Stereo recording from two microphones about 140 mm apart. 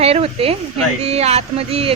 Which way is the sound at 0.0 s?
45° right (ahead or behind).